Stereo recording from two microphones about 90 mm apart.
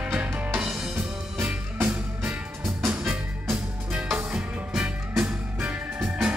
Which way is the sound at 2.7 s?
20° right (ahead or behind).